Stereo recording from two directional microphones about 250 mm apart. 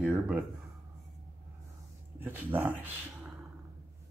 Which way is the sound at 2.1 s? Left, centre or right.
Centre.